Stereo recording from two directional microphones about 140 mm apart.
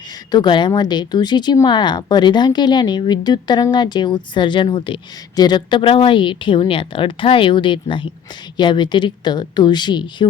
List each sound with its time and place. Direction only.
0.3 s speech: 30° left (ahead or behind)